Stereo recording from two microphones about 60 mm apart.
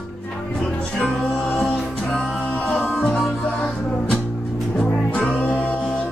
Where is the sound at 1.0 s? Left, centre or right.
Centre.